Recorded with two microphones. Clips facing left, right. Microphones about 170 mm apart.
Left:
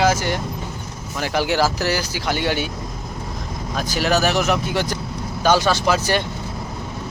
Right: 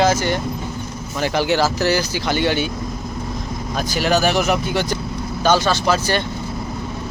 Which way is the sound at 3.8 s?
Centre (ahead or behind).